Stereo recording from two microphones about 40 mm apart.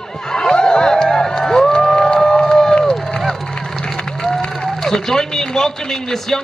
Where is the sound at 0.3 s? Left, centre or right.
Centre.